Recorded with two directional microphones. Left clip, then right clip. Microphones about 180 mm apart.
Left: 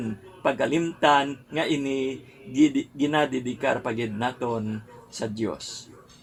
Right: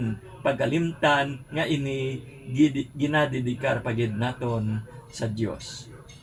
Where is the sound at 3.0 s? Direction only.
50° left (ahead or behind).